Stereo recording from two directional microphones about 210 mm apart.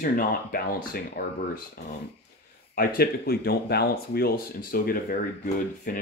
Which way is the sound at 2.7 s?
45° left (ahead or behind).